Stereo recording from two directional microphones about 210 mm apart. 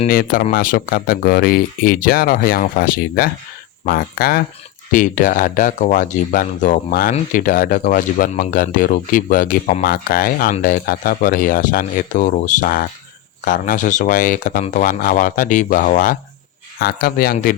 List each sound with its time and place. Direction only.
0.1 s speech: 45° left (ahead or behind)